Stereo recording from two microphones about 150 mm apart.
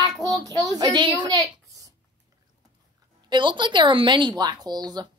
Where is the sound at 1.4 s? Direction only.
20° right (ahead or behind).